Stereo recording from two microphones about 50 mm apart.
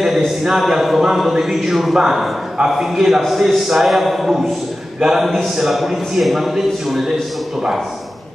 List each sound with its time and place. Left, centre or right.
0.4 s a man's voice: centre